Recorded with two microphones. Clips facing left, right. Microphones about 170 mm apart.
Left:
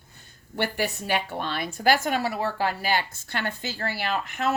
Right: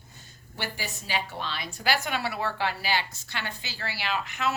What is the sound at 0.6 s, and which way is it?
A woman's voice, 60° left (ahead or behind).